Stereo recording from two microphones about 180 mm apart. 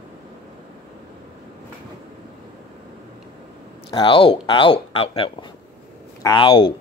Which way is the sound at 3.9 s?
30° left (ahead or behind).